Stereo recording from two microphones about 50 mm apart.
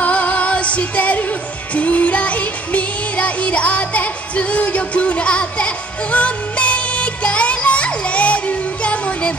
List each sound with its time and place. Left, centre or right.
0.0 s music: left